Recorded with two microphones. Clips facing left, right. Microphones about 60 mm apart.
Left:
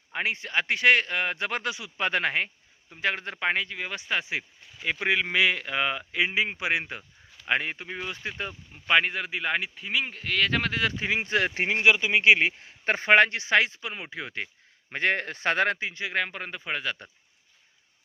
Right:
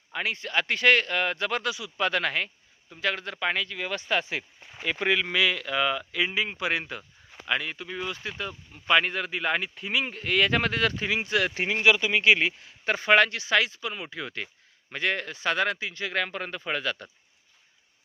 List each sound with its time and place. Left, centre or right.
0.1 s speech: left
7.4 s speech: left; by 10.9 s centre
11.0 s speech: left
14.9 s speech: left
15.9 s speech: centre